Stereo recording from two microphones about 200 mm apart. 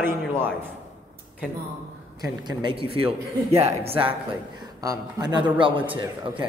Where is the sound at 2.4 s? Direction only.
20° right (ahead or behind).